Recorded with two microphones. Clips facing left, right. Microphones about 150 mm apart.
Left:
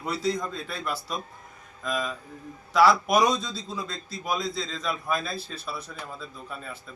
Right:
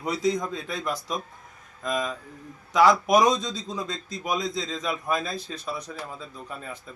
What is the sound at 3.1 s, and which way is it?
Speech, 15° right (ahead or behind).